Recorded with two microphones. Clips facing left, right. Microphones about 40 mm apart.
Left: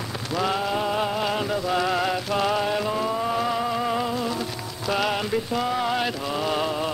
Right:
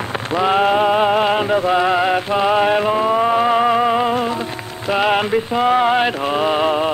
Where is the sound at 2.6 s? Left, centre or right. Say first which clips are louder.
Right 9 dB; right.